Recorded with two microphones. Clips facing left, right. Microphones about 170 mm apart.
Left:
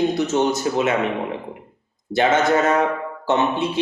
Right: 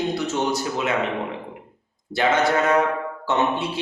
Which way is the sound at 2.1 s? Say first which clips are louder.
Left 3 dB; 20° left (ahead or behind).